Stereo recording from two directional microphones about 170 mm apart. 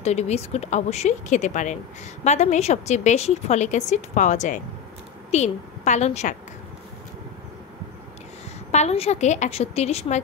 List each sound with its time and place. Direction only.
0.0 s a woman's voice: 40° left (ahead or behind)
8.7 s speech: 40° left (ahead or behind)